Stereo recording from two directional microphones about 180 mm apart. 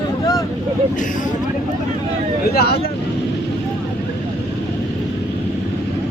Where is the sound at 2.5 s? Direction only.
60° left (ahead or behind).